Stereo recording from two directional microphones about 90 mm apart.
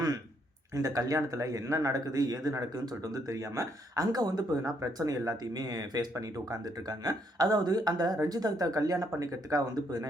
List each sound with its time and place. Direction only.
0.7 s speech: 40° right (ahead or behind)